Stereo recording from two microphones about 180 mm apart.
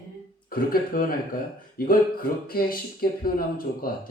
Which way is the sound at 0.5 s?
55° left (ahead or behind).